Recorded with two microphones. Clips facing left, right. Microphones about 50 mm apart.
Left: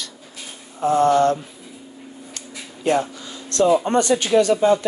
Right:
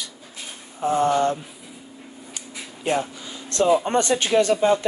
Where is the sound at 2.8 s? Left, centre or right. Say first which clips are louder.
Left 4 dB; centre.